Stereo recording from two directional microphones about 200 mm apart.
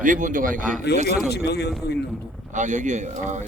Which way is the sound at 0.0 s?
40° right (ahead or behind).